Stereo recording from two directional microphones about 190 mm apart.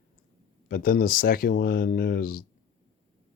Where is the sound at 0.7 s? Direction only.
50° left (ahead or behind).